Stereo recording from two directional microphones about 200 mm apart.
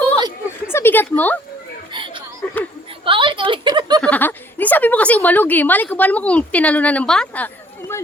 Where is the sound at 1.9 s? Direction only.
25° right (ahead or behind).